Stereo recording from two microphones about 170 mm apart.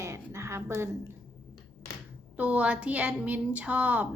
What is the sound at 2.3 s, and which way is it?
A woman's voice, 10° right (ahead or behind).